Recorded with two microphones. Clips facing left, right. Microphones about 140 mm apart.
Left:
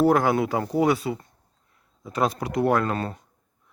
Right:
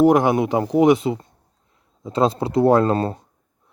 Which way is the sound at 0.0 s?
20° right (ahead or behind).